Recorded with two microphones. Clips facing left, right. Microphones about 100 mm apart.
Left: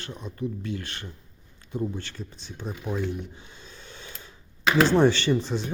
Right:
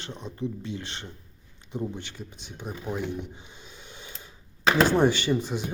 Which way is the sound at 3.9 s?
15° right (ahead or behind).